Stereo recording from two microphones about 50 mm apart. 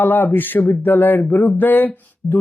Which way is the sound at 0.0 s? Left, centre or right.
Left.